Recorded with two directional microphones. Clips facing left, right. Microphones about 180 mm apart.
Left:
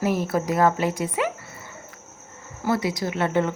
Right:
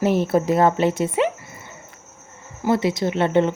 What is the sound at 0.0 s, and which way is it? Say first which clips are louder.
A woman's voice: right 5 dB; 25° right (ahead or behind).